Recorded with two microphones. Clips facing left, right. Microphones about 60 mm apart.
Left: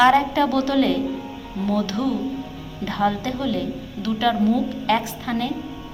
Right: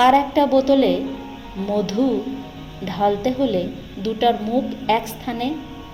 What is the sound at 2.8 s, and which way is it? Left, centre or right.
Speech, centre.